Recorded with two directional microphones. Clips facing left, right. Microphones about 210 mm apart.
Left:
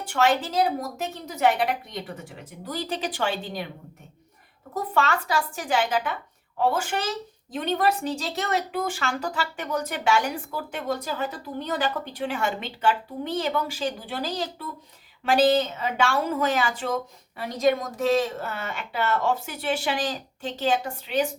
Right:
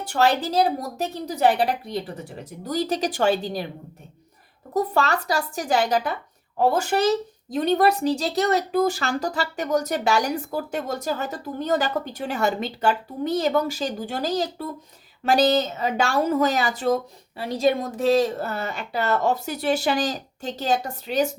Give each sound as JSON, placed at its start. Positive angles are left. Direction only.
{"t": 0.0, "sound": "speech", "side_deg": -35}
{"t": 4.7, "sound": "speech", "side_deg": -40}